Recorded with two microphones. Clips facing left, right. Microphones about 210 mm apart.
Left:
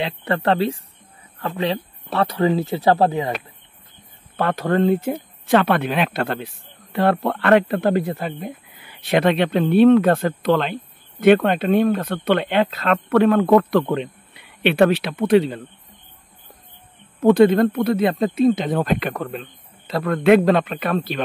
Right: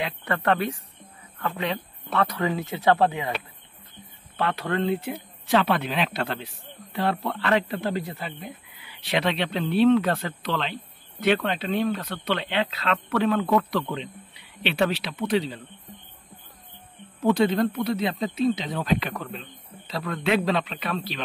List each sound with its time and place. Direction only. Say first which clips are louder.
0.0 s speech: left 5 dB; 30° left (ahead or behind)
4.4 s speech: left 7 dB; 45° left (ahead or behind)
17.2 s speech: left 8 dB; 55° left (ahead or behind)